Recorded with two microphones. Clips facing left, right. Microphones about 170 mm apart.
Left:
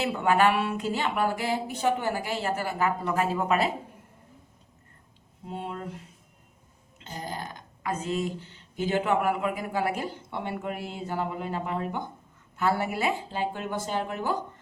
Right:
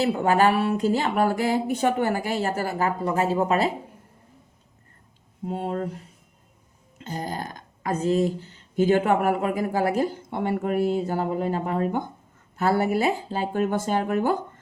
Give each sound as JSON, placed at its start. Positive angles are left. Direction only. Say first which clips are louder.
{"t": 0.0, "sound": "speech", "louder": "right 3 dB", "side_deg": -40}
{"t": 5.5, "sound": "speech", "louder": "right 7 dB", "side_deg": -45}
{"t": 7.0, "sound": "speech", "louder": "right 5 dB", "side_deg": -45}
{"t": 8.8, "sound": "speech", "louder": "right 6 dB", "side_deg": -50}